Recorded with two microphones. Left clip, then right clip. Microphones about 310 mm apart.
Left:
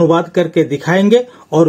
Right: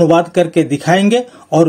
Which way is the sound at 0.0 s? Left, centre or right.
Right.